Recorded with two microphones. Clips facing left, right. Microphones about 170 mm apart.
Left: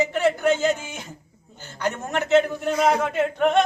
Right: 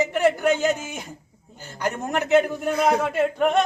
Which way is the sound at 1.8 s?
15° right (ahead or behind).